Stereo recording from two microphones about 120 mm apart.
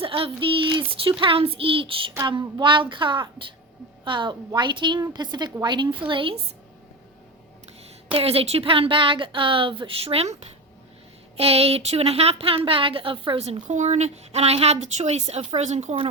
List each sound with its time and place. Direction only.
0.0 s a woman's voice: 50° right (ahead or behind)
8.1 s a woman's voice: 55° right (ahead or behind)
11.3 s a woman's voice: 55° right (ahead or behind); by 16.0 s 70° right (ahead or behind)